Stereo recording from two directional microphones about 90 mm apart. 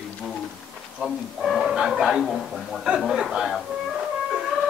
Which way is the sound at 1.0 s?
5° right (ahead or behind).